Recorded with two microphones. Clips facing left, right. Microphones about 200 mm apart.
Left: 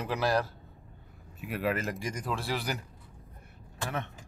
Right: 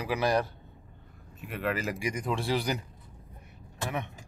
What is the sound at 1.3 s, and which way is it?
Speech, centre (ahead or behind).